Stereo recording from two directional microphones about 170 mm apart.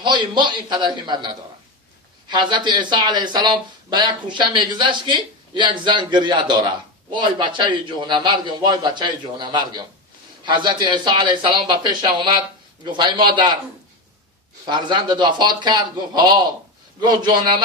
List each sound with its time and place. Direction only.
0.0 s speech: 25° right (ahead or behind)
14.7 s speech: 25° right (ahead or behind)